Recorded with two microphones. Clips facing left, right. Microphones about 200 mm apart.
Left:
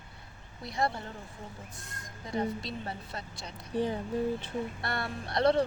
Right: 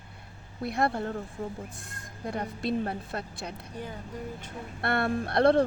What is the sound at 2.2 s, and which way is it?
A woman's voice, 55° right (ahead or behind).